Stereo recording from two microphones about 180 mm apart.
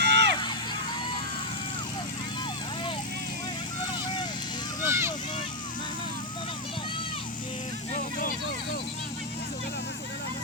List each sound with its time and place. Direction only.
0.0 s music: 70° right (ahead or behind)
4.9 s vehicle: 15° right (ahead or behind)
8.2 s vehicle: 50° left (ahead or behind)